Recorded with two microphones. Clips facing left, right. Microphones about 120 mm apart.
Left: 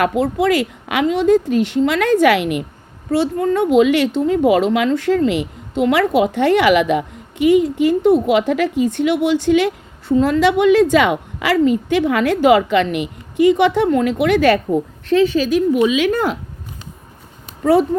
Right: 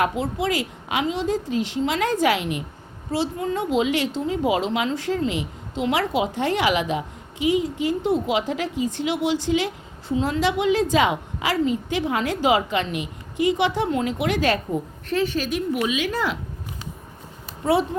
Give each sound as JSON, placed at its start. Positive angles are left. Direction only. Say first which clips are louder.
{"t": 0.0, "sound": "speech", "louder": "left 7 dB", "side_deg": 60}
{"t": 16.1, "sound": "speech", "louder": "left 6 dB", "side_deg": 45}